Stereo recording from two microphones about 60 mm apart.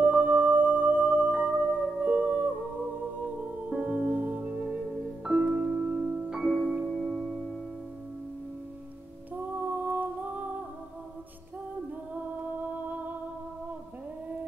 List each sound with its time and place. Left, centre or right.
0.0 s music: right
3.7 s music: right
5.2 s music: centre
6.9 s music: centre
9.3 s music: right